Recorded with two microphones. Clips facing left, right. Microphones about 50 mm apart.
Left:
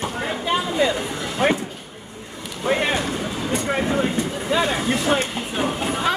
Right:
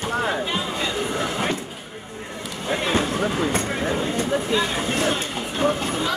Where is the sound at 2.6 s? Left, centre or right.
Left.